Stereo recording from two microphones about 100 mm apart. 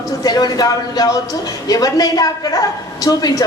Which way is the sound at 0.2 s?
40° left (ahead or behind).